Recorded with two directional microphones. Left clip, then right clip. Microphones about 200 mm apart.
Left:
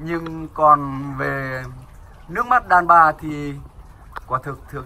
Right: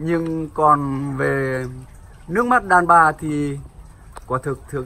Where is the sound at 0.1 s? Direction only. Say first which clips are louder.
Right 5 dB; 15° right (ahead or behind).